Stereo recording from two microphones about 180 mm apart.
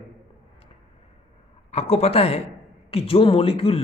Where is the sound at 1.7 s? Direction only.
35° left (ahead or behind).